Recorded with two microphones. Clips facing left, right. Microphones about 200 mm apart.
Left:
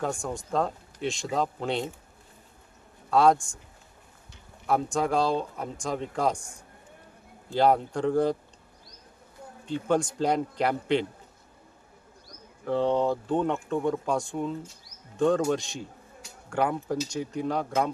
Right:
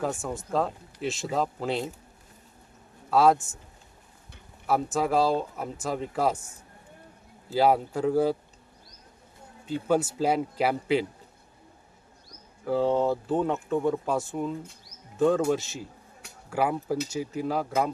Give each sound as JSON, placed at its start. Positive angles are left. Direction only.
{"t": 0.0, "sound": "speech", "side_deg": -5}
{"t": 3.1, "sound": "speech", "side_deg": -5}
{"t": 4.6, "sound": "speech", "side_deg": -5}
{"t": 9.9, "sound": "speech", "side_deg": -5}
{"t": 12.6, "sound": "speech", "side_deg": -5}